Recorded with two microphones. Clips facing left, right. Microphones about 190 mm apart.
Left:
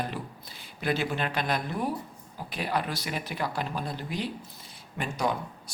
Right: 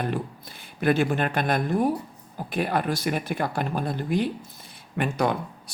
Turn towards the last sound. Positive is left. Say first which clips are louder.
# right 5 dB
turn(degrees=-60)  # may be behind; listen again after turning